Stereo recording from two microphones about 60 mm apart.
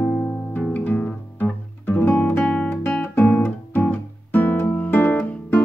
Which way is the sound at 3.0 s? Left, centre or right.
Left.